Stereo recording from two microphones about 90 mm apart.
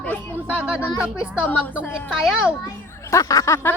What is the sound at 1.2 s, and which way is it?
Speech, 25° left (ahead or behind).